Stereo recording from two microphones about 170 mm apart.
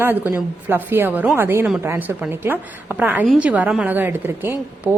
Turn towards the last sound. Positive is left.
turn(degrees=-10)  # may be behind; listen again after turning